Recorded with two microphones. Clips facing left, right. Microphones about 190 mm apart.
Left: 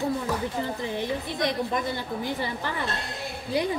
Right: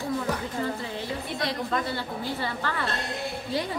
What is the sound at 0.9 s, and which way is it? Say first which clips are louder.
A woman's voice: left 3 dB; 20° left (ahead or behind).